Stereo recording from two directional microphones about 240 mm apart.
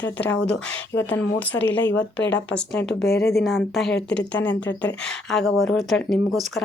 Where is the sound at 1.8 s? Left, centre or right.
Left.